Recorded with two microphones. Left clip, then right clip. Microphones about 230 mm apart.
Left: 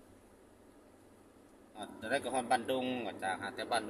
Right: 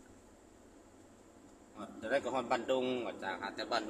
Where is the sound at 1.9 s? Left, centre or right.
Left.